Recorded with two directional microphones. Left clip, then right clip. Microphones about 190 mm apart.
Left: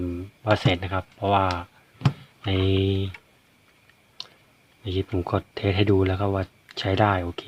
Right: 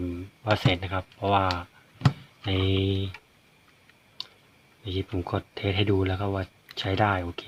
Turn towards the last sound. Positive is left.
turn(degrees=20)  # may be behind; listen again after turning